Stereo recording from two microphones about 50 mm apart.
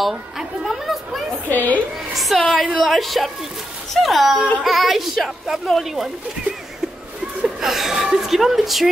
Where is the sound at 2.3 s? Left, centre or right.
Left.